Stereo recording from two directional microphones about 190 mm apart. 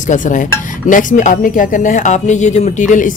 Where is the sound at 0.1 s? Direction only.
40° left (ahead or behind).